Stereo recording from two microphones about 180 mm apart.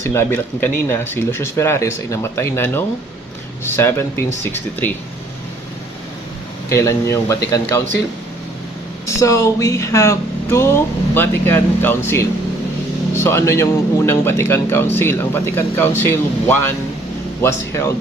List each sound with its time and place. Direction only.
0.0 s speech: 15° left (ahead or behind)
6.7 s speech: 15° left (ahead or behind)
9.0 s speech: 15° left (ahead or behind)